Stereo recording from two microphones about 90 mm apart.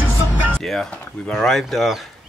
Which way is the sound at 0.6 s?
5° left (ahead or behind).